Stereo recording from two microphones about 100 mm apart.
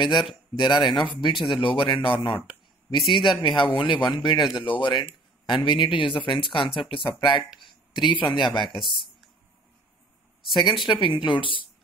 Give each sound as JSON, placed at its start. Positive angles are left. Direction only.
{"t": 0.6, "sound": "speech", "side_deg": 50}
{"t": 3.2, "sound": "speech", "side_deg": 55}
{"t": 8.6, "sound": "speech", "side_deg": 0}
{"t": 10.5, "sound": "speech", "side_deg": 50}